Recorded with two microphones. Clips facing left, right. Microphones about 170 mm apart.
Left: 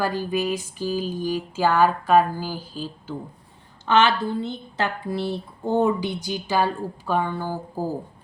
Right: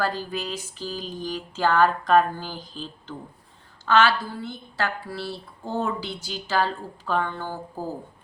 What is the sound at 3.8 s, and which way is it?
A woman's voice, 20° left (ahead or behind).